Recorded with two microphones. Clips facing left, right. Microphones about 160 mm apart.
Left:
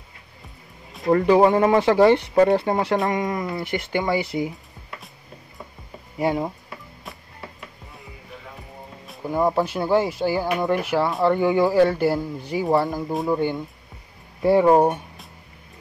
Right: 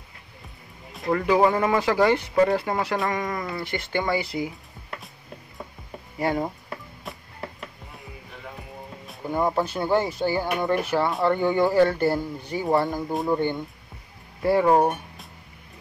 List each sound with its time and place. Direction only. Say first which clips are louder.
1.0 s speech: left 4 dB; 35° left (ahead or behind)
6.1 s speech: left 2 dB; 15° left (ahead or behind)
7.1 s music: right 2 dB; centre (ahead or behind)
9.0 s speech: left 3 dB; 5° left (ahead or behind)
14.4 s speech: left 3 dB; 20° left (ahead or behind)